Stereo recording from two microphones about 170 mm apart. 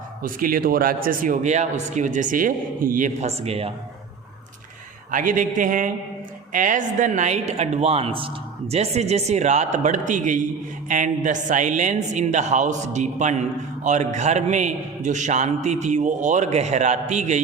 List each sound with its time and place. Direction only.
0.2 s a man's voice: 55° right (ahead or behind); by 3.7 s 35° right (ahead or behind)
5.1 s a man's voice: 50° right (ahead or behind)